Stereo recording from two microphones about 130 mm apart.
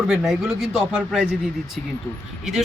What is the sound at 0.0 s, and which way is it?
A man's voice, 5° right (ahead or behind).